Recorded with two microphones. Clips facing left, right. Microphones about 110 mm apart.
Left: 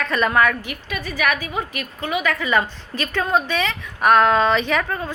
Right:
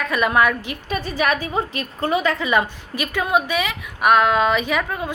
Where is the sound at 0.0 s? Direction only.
10° right (ahead or behind).